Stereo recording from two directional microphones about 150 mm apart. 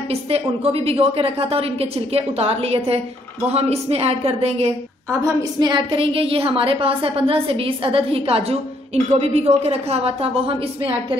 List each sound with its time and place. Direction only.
0.1 s a woman's voice: 40° right (ahead or behind)
5.2 s a woman's voice: 25° right (ahead or behind)